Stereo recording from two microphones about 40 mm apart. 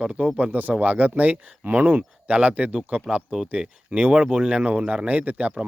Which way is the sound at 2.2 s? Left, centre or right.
Right.